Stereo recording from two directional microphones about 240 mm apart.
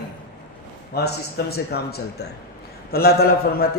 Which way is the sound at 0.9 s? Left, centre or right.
Left.